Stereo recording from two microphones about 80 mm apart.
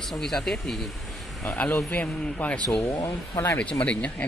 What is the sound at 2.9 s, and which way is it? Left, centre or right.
Speech, left.